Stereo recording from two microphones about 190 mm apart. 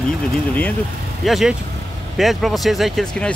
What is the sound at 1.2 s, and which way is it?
Speech, centre (ahead or behind).